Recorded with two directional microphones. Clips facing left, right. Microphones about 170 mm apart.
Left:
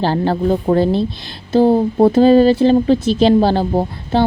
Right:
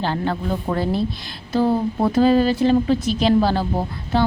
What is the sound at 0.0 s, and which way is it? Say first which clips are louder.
A woman's voice: left 7 dB; 35° left (ahead or behind).